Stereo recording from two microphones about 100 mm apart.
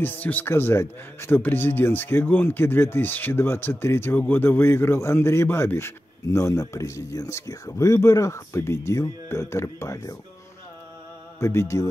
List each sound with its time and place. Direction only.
0.0 s speech: 20° left (ahead or behind)
11.3 s speech: 30° left (ahead or behind)